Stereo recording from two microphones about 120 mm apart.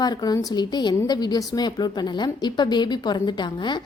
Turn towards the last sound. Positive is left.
turn(degrees=40)  # may be behind; listen again after turning